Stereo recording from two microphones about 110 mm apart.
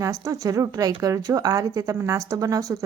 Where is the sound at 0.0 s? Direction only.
30° right (ahead or behind).